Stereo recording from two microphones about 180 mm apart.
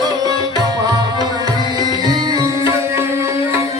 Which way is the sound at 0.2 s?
20° right (ahead or behind).